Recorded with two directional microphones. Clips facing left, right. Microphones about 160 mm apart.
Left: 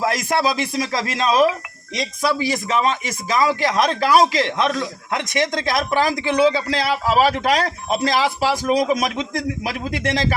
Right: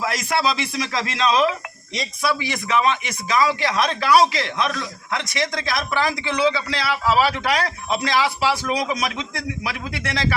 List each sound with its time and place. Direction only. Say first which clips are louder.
0.0 s a man's voice: left 3 dB; 50° left (ahead or behind)